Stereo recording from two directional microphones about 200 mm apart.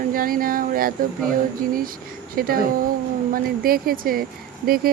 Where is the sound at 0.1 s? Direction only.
45° right (ahead or behind).